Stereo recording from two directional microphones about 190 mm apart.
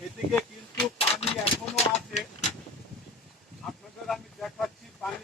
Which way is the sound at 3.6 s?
Centre (ahead or behind).